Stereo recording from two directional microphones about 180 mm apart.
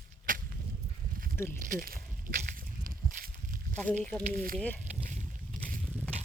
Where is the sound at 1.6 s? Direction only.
50° right (ahead or behind).